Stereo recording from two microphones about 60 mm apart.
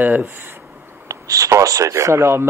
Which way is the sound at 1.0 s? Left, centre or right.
Right.